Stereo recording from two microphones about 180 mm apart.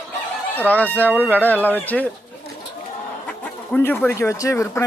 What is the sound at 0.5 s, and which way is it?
Speech, 10° left (ahead or behind).